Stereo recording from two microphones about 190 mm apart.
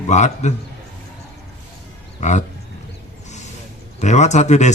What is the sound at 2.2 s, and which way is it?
Speech, 40° left (ahead or behind).